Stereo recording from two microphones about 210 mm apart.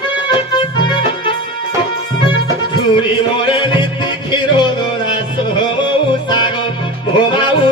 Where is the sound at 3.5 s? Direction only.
20° left (ahead or behind).